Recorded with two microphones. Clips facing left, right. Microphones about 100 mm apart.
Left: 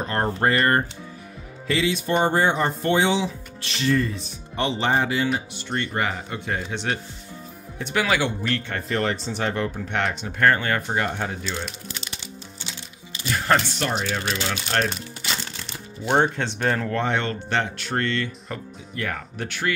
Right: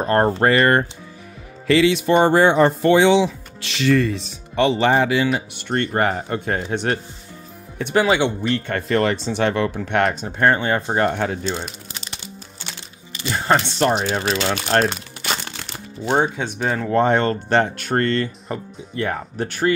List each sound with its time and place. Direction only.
0.0 s speech: 45° right (ahead or behind)
0.4 s speech: 75° right (ahead or behind)
5.5 s speech: 55° right (ahead or behind)
7.9 s speech: 25° right (ahead or behind)
8.8 s speech: 85° right
10.2 s speech: 25° right (ahead or behind)
11.1 s speech: 70° right (ahead or behind)
11.4 s speech: 35° right (ahead or behind)
12.6 s music: 60° right (ahead or behind)
13.3 s speech: 30° right (ahead or behind)
14.5 s speech: 55° right (ahead or behind)
14.9 s crumpling: 65° right (ahead or behind)
16.1 s speech: 10° right (ahead or behind)
16.9 s speech: 40° right (ahead or behind)